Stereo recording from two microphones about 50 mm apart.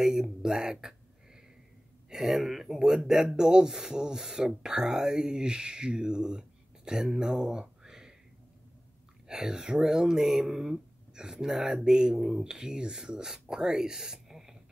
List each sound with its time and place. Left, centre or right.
0.0 s a sound: centre
2.0 s speech: centre
9.3 s speech: centre